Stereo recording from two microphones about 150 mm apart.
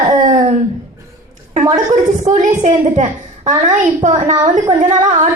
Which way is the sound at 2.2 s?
55° right (ahead or behind).